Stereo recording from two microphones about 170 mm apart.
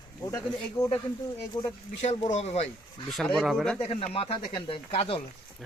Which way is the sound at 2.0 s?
40° left (ahead or behind).